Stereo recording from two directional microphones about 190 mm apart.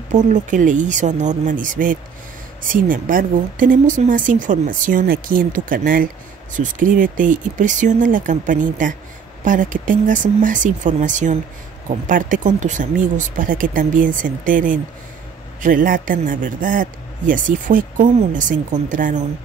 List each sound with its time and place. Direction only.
0.1 s speech: 40° right (ahead or behind)